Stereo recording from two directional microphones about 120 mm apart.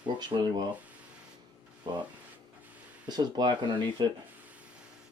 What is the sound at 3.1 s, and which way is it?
Speech, 35° right (ahead or behind).